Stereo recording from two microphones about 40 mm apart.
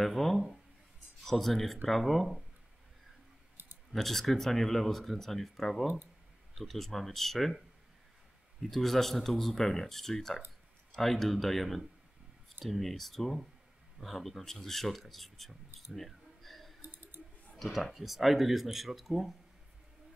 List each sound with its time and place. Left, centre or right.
0.0 s speech: centre
3.9 s speech: centre
8.6 s speech: centre
16.8 s a sound: right
17.6 s speech: centre